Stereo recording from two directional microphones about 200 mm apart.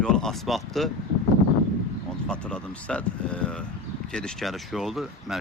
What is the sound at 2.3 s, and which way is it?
Speech, 5° left (ahead or behind).